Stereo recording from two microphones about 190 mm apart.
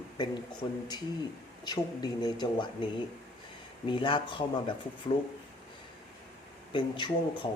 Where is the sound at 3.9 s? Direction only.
25° left (ahead or behind).